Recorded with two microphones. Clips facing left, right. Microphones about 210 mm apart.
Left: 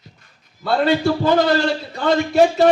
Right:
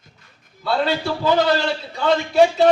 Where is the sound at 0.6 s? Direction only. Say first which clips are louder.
Left 4 dB; 45° left (ahead or behind).